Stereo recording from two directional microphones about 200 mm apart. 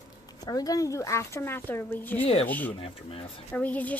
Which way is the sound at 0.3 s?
20° left (ahead or behind).